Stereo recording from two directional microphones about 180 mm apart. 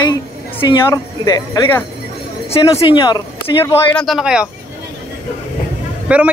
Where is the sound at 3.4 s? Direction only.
10° left (ahead or behind).